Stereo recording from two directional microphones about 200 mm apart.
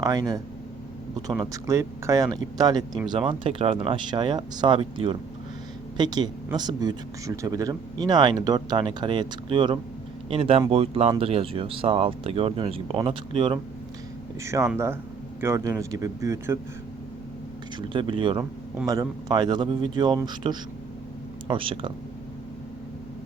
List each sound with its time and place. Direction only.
0.0 s speech: 20° right (ahead or behind)
1.6 s speech: 15° right (ahead or behind)
14.4 s speech: 15° right (ahead or behind)
17.7 s speech: 25° right (ahead or behind)